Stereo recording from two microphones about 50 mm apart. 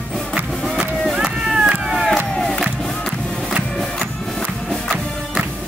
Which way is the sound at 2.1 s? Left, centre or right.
Centre.